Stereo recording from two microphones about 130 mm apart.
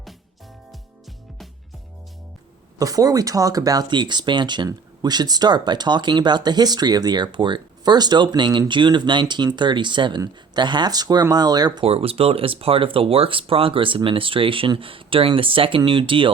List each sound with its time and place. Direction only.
2.7 s speech: 25° right (ahead or behind)
11.9 s speech: 50° right (ahead or behind)